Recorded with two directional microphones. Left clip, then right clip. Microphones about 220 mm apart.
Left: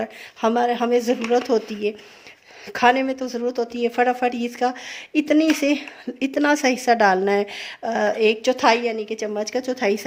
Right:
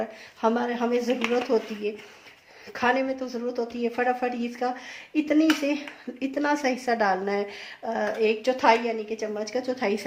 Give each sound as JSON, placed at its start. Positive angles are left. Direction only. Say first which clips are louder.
{"t": 0.0, "sound": "speech", "louder": "left 3 dB", "side_deg": 40}